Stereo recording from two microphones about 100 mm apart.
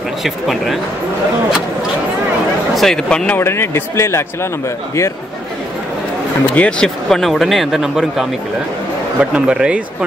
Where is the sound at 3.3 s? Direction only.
25° left (ahead or behind).